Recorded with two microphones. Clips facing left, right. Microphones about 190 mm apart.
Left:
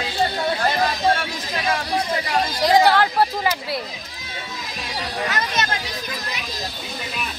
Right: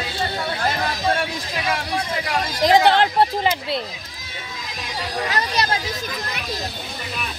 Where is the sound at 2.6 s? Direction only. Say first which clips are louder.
Right 1 dB; 20° right (ahead or behind).